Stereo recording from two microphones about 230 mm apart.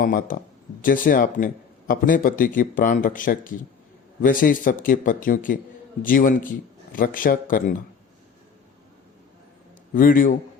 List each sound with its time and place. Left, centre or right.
0.0 s a man's voice: left
9.9 s a man's voice: left